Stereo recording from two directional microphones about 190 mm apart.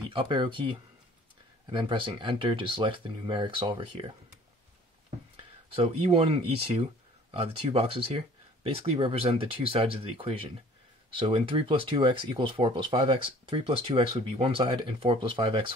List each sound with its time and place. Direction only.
0.1 s speech: 25° right (ahead or behind)
5.8 s speech: 30° right (ahead or behind)